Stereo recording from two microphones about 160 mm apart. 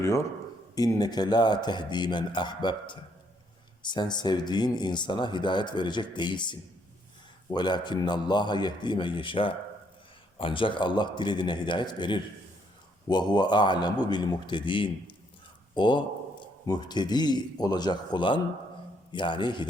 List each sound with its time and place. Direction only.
0.0 s a man's voice: 15° left (ahead or behind)